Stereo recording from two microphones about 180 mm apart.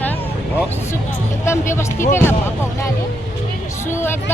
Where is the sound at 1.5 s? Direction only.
15° left (ahead or behind).